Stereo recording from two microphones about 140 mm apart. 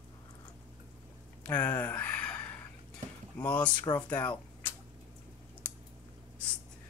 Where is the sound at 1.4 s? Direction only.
10° left (ahead or behind).